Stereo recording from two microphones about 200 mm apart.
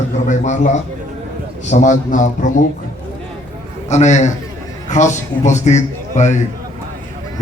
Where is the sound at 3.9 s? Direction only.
35° left (ahead or behind).